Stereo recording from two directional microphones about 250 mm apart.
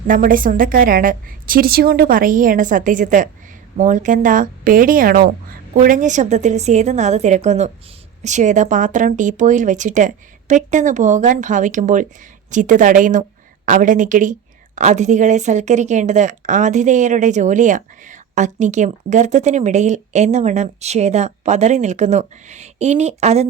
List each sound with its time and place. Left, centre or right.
0.1 s a woman's voice: right